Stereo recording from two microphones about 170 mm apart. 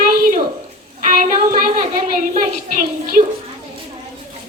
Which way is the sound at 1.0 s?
55° right (ahead or behind).